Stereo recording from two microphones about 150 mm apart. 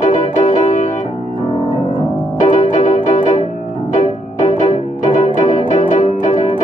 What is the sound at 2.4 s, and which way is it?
Music, 55° left (ahead or behind).